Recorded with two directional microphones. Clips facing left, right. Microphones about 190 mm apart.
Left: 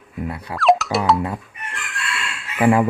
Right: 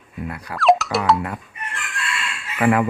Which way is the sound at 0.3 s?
25° left (ahead or behind).